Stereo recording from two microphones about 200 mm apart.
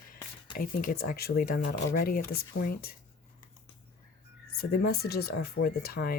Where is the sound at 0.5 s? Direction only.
45° left (ahead or behind).